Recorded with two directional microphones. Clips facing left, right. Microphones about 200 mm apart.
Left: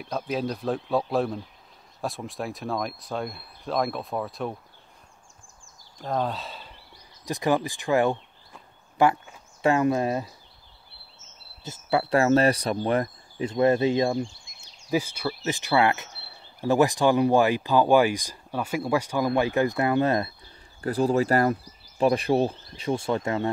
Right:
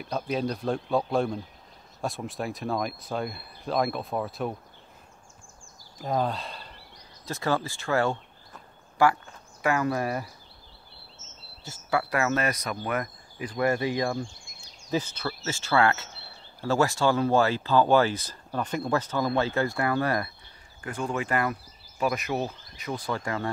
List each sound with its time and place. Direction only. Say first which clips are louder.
0.0 s speech: even; centre (ahead or behind)
5.9 s speech: even; 5° right (ahead or behind)
7.2 s speech: left 4 dB; 15° left (ahead or behind)
11.2 s a sound: right 3 dB; 40° right (ahead or behind)
11.6 s speech: left 3 dB; 20° left (ahead or behind)
14.9 s speech: left 3 dB; 10° left (ahead or behind)
20.8 s speech: left 8 dB; 35° left (ahead or behind)